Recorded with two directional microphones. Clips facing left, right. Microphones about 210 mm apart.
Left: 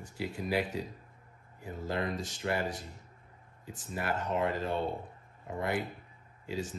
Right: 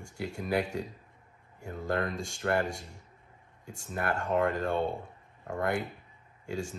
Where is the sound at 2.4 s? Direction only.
50° right (ahead or behind).